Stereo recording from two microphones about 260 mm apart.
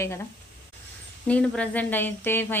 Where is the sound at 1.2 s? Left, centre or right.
Centre.